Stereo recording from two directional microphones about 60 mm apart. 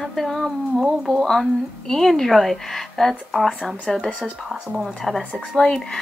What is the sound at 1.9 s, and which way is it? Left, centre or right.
A woman's voice, centre.